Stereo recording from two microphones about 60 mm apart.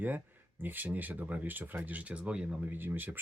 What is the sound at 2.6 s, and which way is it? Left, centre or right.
Speech, right.